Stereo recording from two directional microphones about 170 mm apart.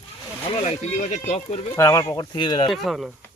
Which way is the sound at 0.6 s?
45° left (ahead or behind).